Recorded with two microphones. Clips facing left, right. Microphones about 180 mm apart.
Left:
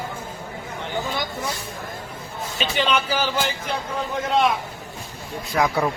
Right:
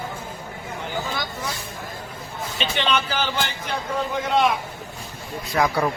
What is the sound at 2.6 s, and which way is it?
Speech, 5° left (ahead or behind).